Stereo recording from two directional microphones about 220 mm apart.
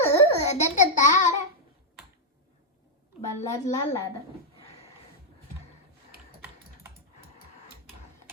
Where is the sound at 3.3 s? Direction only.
30° left (ahead or behind).